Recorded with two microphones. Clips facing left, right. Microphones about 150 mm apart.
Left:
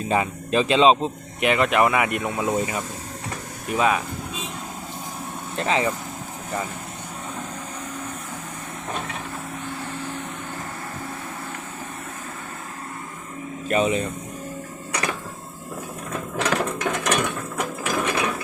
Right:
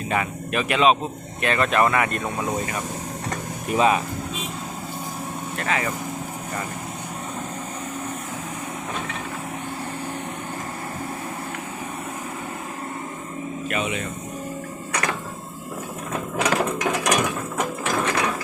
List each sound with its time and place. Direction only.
0.1 s speech: 30° left (ahead or behind)
3.8 s speech: centre (ahead or behind)
5.5 s speech: 25° left (ahead or behind)
13.7 s speech: 35° left (ahead or behind)
16.1 s mechanisms: centre (ahead or behind)
17.9 s mechanisms: 10° left (ahead or behind)